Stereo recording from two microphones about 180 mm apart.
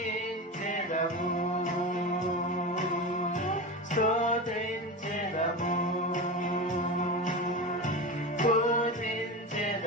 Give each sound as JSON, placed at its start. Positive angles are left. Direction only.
{"t": 3.9, "sound": "music", "side_deg": 45}
{"t": 8.4, "sound": "music", "side_deg": 45}